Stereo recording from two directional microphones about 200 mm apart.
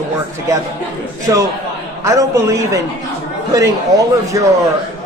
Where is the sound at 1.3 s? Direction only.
15° right (ahead or behind).